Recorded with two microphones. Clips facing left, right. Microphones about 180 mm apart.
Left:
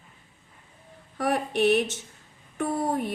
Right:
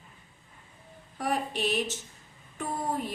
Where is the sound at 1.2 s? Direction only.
65° left (ahead or behind).